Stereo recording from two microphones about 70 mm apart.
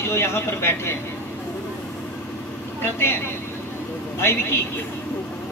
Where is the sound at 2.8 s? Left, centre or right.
Left.